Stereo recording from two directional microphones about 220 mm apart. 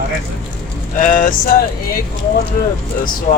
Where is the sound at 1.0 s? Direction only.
35° left (ahead or behind).